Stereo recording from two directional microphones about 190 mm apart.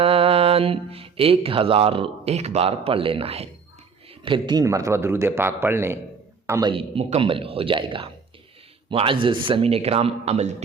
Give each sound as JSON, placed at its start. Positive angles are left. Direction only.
{"t": 0.0, "sound": "a man's voice", "side_deg": -30}
{"t": 6.5, "sound": "a man's voice", "side_deg": -25}